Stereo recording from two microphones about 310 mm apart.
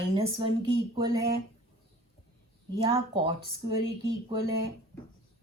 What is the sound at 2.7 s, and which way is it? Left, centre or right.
Speech, centre.